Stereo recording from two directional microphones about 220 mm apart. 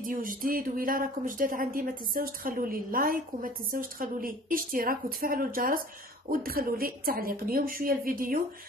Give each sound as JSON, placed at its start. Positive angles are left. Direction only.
{"t": 0.0, "sound": "speech", "side_deg": -40}